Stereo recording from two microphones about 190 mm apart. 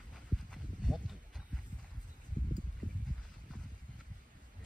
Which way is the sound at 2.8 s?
45° left (ahead or behind).